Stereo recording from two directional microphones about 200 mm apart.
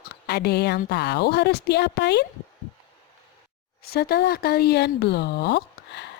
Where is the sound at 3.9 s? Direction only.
50° left (ahead or behind).